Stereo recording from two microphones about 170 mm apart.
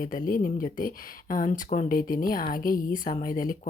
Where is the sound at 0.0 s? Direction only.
55° left (ahead or behind).